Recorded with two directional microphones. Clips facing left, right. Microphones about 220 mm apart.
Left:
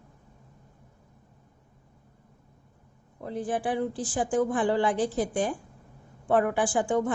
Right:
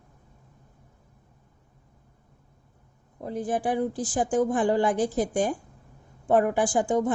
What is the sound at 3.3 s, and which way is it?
A woman's voice, 40° right (ahead or behind).